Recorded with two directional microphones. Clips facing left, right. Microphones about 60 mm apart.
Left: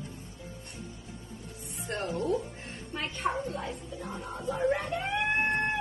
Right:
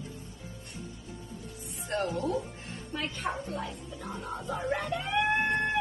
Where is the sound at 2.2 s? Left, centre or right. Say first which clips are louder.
Left 1 dB; left.